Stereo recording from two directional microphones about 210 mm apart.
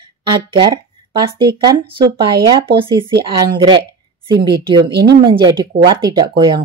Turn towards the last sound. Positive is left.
turn(degrees=-20)  # may be behind; listen again after turning